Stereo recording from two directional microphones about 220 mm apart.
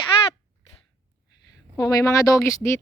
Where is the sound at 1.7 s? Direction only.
15° left (ahead or behind).